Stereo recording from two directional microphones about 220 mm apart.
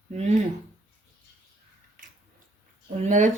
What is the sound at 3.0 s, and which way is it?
Speech, 35° right (ahead or behind).